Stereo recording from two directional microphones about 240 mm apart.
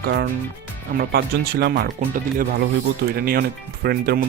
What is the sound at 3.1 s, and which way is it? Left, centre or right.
Speech, right.